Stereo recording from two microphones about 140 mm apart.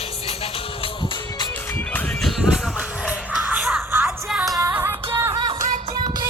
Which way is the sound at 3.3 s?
10° right (ahead or behind).